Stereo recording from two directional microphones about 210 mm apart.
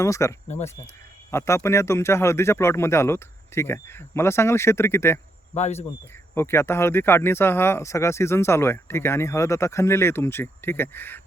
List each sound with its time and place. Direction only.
0.0 s speech: 15° left (ahead or behind)
0.4 s speech: 35° left (ahead or behind)
1.3 s speech: 15° left (ahead or behind)
5.5 s speech: 30° left (ahead or behind)
6.3 s speech: 10° left (ahead or behind)